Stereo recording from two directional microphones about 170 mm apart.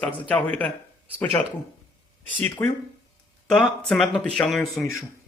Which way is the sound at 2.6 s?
15° left (ahead or behind).